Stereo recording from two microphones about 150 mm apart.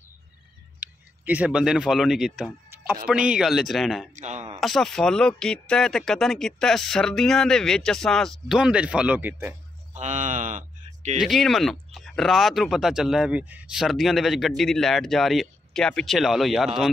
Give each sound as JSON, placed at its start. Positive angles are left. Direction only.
{"t": 0.7, "sound": "speech", "side_deg": -10}
{"t": 4.1, "sound": "speech", "side_deg": -50}
{"t": 4.6, "sound": "speech", "side_deg": 0}
{"t": 9.9, "sound": "speech", "side_deg": -55}
{"t": 11.1, "sound": "speech", "side_deg": 0}